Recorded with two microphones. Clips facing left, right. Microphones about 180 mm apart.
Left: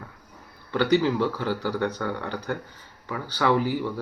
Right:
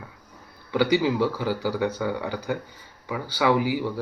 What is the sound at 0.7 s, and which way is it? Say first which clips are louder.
Speech: even; 10° right (ahead or behind).